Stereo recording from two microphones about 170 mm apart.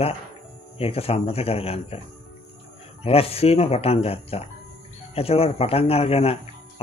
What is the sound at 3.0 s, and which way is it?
Speech, 35° left (ahead or behind).